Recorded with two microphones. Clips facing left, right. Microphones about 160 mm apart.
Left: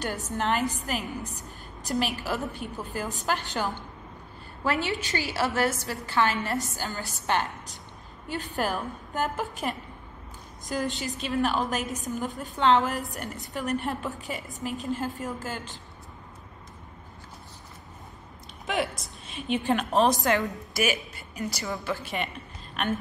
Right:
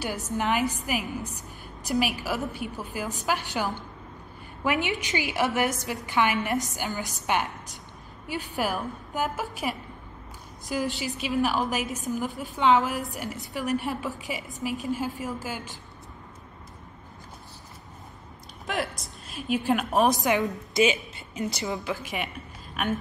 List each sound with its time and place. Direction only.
0.4 s a woman's voice: 10° right (ahead or behind)
8.5 s a woman's voice: 5° right (ahead or behind)
11.8 s a woman's voice: 40° left (ahead or behind)
12.4 s a woman's voice: 10° right (ahead or behind)
18.7 s a woman's voice: centre (ahead or behind); by 21.9 s 20° right (ahead or behind)
22.0 s a woman's voice: 10° right (ahead or behind)